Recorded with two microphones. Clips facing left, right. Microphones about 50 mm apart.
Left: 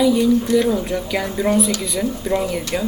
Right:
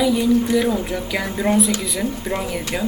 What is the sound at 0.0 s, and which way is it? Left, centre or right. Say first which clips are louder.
Speech: left 2 dB; centre.